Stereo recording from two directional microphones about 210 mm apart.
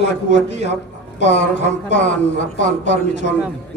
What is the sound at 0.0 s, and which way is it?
Speech, 55° left (ahead or behind).